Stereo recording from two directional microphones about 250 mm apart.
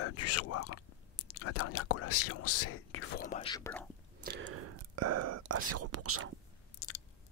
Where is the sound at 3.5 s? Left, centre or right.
Centre.